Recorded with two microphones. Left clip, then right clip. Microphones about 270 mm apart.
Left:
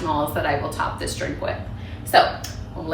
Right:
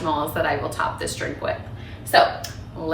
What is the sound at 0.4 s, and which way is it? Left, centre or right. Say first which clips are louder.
A woman's voice: even; centre.